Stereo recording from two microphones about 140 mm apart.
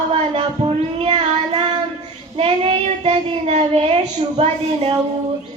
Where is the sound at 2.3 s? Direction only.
45° right (ahead or behind).